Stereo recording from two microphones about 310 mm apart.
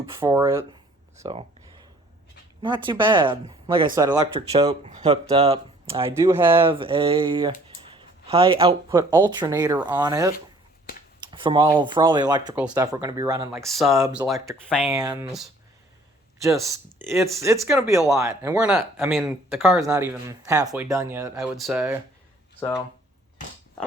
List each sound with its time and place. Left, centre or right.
0.2 s speech: centre
2.6 s speech: centre
13.6 s speech: centre
13.9 s speech: centre
14.7 s speech: centre
14.9 s speech: centre
16.4 s speech: centre